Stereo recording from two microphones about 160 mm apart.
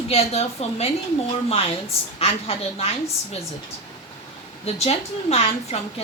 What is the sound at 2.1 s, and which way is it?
Speech, 40° left (ahead or behind).